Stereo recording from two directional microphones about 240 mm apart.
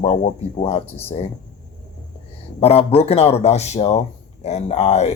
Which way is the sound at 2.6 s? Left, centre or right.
Left.